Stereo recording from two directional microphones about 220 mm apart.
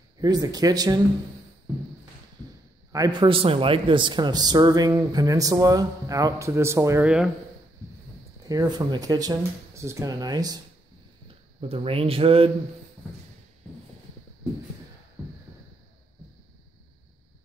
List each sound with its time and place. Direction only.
0.2 s speech: 20° right (ahead or behind)
2.9 s speech: 20° right (ahead or behind)
8.5 s speech: 15° right (ahead or behind)
11.7 s speech: 25° right (ahead or behind)